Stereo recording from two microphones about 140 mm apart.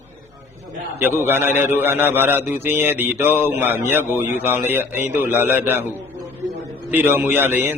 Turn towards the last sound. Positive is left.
turn(degrees=-15)  # may be behind; listen again after turning